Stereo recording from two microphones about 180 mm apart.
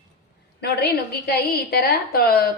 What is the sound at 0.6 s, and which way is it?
A woman's voice, 65° left (ahead or behind).